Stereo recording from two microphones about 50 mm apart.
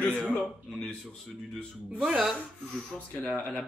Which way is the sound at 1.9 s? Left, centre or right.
Centre.